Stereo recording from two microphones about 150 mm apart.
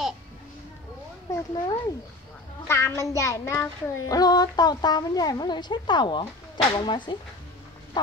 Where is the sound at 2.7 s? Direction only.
20° left (ahead or behind).